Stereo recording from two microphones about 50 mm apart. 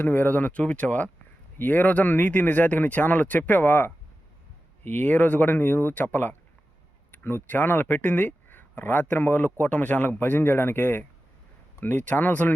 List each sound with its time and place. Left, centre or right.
0.0 s speech: left